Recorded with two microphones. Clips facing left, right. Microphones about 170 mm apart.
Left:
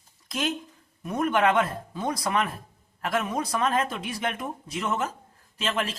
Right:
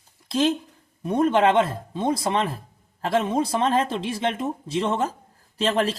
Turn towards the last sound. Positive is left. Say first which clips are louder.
# right 7 dB
turn(degrees=-35)  # may be behind; listen again after turning